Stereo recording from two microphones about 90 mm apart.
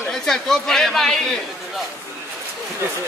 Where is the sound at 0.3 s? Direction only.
5° left (ahead or behind).